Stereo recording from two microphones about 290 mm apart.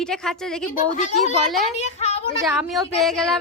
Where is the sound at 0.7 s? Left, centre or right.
Left.